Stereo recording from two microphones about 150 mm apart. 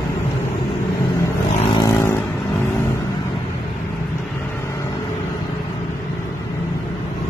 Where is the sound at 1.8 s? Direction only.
20° left (ahead or behind).